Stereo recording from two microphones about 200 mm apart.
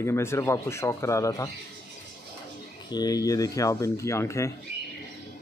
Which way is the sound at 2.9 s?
20° left (ahead or behind).